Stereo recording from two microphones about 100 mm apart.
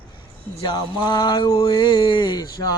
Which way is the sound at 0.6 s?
45° left (ahead or behind).